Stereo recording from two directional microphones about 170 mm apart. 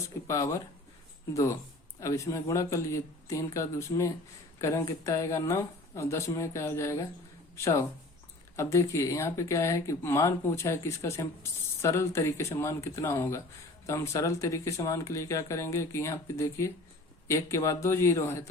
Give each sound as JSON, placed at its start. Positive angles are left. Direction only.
{"t": 0.3, "sound": "speech", "side_deg": 15}